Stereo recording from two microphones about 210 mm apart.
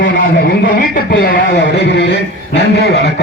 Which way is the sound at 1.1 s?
55° left (ahead or behind).